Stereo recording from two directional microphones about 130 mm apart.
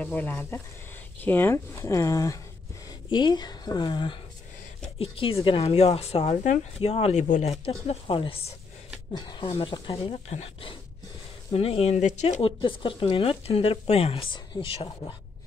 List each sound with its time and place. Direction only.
0.0 s speech: 10° left (ahead or behind); by 6.6 s 65° left (ahead or behind)
6.8 s speech: 50° left (ahead or behind)
10.3 s speech: 50° left (ahead or behind)